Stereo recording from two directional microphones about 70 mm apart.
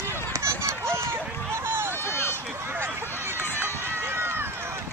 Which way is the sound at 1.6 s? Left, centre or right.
Right.